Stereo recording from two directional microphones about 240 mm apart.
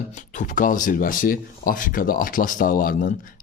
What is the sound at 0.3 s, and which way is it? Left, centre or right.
Speech, left.